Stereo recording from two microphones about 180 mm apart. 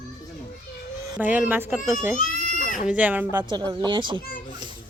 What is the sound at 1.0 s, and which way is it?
Speech, 15° right (ahead or behind).